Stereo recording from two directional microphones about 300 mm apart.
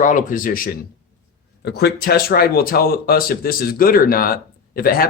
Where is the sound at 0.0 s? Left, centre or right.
Left.